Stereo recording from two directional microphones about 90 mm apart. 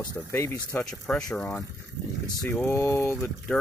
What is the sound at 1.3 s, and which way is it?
Speech, 30° left (ahead or behind).